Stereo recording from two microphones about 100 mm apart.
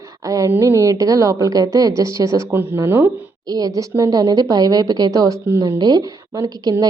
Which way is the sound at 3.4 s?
40° right (ahead or behind).